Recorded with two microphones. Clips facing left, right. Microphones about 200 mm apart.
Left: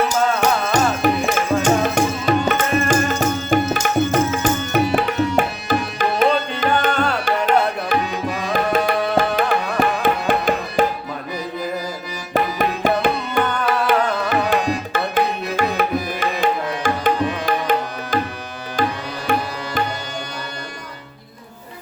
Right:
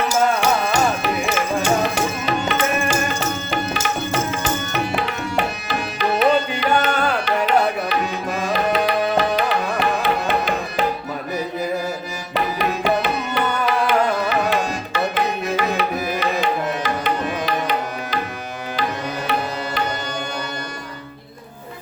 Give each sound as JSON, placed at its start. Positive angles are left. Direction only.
{"t": 1.0, "sound": "tabla", "side_deg": 45}
{"t": 6.9, "sound": "tabla", "side_deg": -5}
{"t": 7.3, "sound": "music", "side_deg": 50}
{"t": 12.3, "sound": "music", "side_deg": 50}
{"t": 19.3, "sound": "music", "side_deg": 50}